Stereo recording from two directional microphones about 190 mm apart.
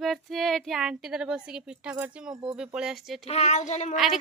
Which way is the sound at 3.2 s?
35° left (ahead or behind).